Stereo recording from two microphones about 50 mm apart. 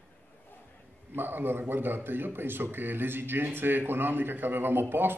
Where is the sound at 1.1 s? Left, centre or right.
Right.